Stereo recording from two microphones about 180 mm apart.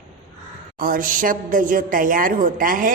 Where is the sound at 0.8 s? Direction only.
50° right (ahead or behind).